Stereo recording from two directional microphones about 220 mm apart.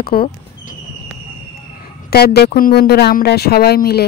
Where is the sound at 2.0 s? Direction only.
45° left (ahead or behind).